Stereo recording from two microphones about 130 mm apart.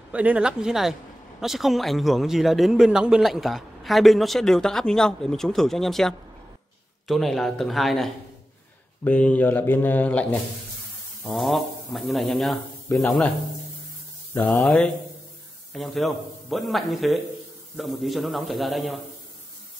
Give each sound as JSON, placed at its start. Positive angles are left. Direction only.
{"t": 0.1, "sound": "a man's voice", "side_deg": -10}
{"t": 11.2, "sound": "a man's voice", "side_deg": 0}
{"t": 14.3, "sound": "a man's voice", "side_deg": 0}